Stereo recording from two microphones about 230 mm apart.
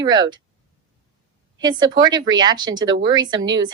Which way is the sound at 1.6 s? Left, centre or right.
Centre.